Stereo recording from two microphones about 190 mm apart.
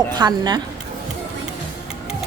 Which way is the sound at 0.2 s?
20° right (ahead or behind).